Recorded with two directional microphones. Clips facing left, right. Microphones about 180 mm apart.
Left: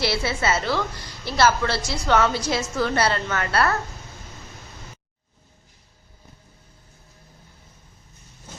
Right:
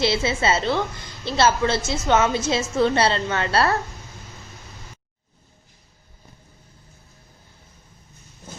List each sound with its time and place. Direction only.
0.0 s a woman's voice: 25° right (ahead or behind)